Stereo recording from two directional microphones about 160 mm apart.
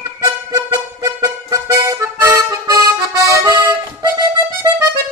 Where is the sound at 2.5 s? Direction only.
20° right (ahead or behind).